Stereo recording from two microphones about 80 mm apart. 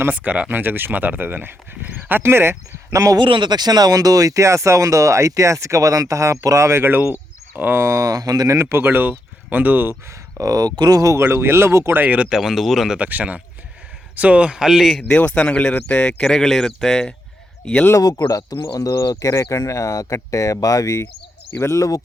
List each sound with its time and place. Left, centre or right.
0.1 s speech: centre; by 3.2 s right
3.2 s speech: right
8.5 s speech: right
9.9 s speech: right
12.0 s speech: centre
12.3 s speech: centre
13.0 s speech: centre
15.0 s speech: centre
18.0 s speech: left